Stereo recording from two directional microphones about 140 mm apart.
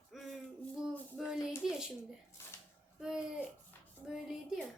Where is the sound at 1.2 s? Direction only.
5° right (ahead or behind).